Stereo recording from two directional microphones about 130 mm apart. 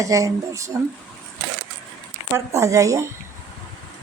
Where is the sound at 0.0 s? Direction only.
25° right (ahead or behind).